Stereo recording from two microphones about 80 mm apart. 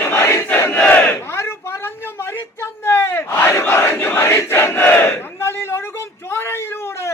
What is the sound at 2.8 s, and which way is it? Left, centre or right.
Battle cry, left.